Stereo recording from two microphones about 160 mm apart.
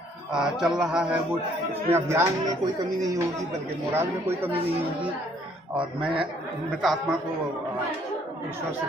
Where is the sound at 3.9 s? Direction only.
15° right (ahead or behind).